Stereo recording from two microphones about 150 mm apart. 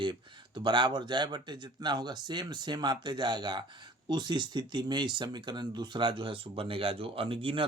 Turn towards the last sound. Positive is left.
turn(degrees=-35)  # may be behind; listen again after turning